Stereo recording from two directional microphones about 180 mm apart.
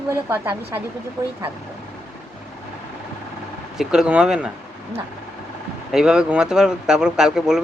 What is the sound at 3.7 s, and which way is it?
Speech, 5° right (ahead or behind).